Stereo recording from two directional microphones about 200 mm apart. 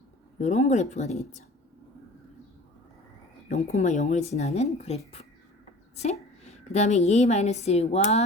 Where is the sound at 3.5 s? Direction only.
35° left (ahead or behind).